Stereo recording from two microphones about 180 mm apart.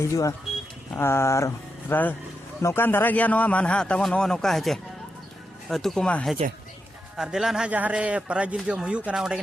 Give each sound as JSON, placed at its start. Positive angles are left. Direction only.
{"t": 0.0, "sound": "a man's voice", "side_deg": 15}